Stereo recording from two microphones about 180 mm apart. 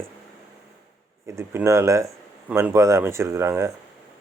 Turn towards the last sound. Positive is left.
turn(degrees=-15)  # may be behind; listen again after turning